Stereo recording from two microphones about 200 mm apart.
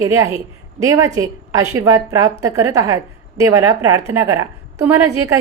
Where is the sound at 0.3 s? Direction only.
15° right (ahead or behind).